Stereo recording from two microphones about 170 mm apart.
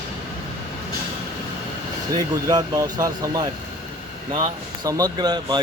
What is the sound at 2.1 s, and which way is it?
Speech, 25° right (ahead or behind).